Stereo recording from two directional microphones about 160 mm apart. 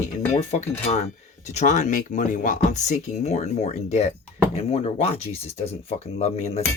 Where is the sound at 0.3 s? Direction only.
40° left (ahead or behind).